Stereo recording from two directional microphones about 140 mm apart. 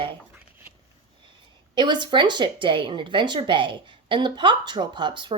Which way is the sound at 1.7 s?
35° right (ahead or behind).